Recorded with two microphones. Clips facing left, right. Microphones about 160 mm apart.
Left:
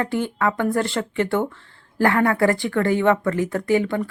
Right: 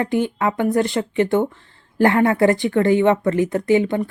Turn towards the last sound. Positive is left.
turn(degrees=-20)  # may be behind; listen again after turning